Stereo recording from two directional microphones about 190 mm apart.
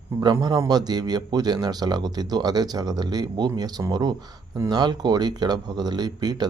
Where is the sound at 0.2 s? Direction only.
20° right (ahead or behind).